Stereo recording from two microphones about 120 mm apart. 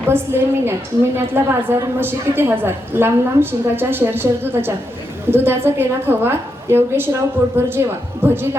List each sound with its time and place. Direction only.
0.1 s a woman's voice: 20° right (ahead or behind)